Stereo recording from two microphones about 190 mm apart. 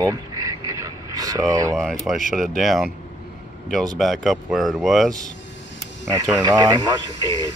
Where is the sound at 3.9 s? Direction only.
Centre (ahead or behind).